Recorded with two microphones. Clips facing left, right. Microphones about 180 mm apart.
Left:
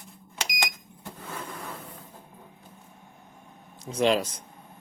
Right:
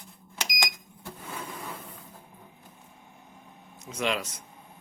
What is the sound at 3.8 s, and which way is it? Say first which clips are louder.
Speech: left 7 dB; 35° left (ahead or behind).